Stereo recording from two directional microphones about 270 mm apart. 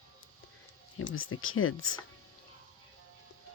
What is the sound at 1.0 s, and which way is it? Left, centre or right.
Speech, left.